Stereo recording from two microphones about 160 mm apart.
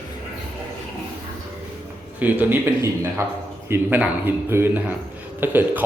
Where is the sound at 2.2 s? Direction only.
10° right (ahead or behind).